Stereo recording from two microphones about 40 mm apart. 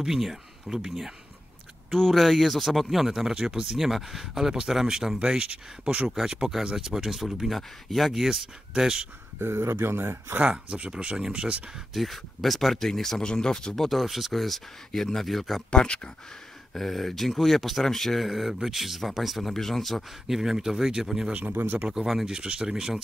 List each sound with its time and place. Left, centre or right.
0.0 s speech: centre
1.9 s speech: centre
5.2 s speech: right
6.2 s speech: centre
8.1 s speech: centre
9.4 s speech: right
10.4 s speech: right
11.9 s speech: centre
13.8 s speech: centre
15.7 s speech: left
16.7 s speech: centre
20.2 s speech: centre
21.4 s speech: right
22.2 s speech: right